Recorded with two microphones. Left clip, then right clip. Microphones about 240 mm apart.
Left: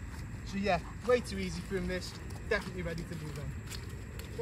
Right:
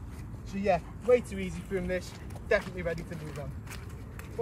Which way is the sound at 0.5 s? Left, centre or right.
Centre.